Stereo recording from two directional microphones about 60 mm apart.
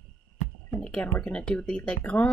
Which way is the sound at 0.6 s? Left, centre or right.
Centre.